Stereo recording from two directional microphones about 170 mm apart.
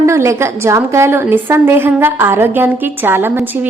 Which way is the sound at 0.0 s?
15° right (ahead or behind).